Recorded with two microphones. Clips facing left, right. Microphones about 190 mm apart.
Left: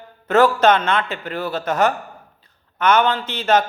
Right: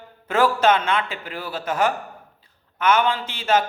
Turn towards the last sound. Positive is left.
turn(degrees=-10)  # may be behind; listen again after turning